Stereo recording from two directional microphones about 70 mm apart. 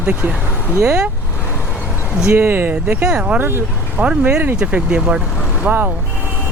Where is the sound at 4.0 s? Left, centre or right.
Right.